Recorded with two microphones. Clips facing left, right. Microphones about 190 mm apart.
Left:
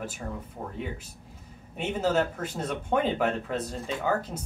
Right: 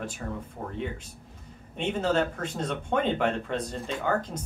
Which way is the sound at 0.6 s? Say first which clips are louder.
Even; centre (ahead or behind).